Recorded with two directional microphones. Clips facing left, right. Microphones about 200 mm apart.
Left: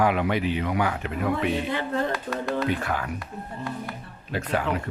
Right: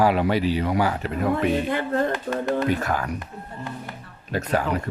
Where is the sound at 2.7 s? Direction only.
40° right (ahead or behind).